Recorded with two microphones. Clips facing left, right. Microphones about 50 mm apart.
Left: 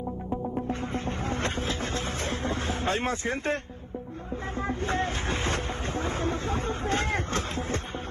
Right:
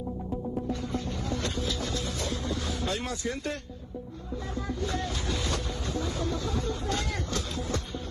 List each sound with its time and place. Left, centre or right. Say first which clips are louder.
0.3 s music: left 2 dB; left
4.6 s speech: left 4 dB; left